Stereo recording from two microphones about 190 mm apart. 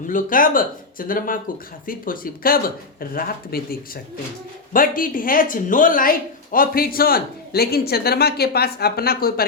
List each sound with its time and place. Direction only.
0.1 s speech: 45° left (ahead or behind)